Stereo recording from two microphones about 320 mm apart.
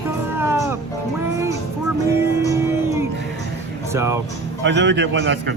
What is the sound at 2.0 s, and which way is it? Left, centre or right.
Music, centre.